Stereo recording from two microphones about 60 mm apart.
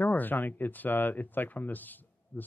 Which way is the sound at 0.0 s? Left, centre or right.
Left.